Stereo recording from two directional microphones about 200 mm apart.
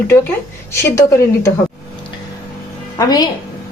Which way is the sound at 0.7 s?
15° left (ahead or behind).